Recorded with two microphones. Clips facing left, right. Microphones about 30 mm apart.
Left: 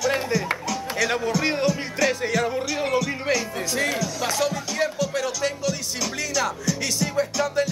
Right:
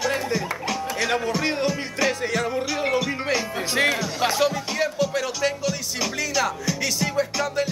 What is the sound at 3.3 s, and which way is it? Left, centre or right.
Speech, centre.